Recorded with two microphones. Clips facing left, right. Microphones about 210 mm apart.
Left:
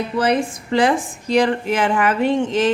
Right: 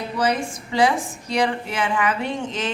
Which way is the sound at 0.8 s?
50° left (ahead or behind).